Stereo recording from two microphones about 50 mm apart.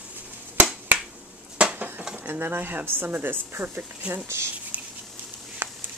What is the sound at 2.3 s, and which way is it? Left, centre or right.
Speech, right.